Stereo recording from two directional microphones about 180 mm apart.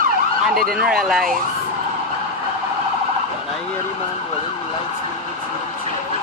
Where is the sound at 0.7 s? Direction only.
Centre (ahead or behind).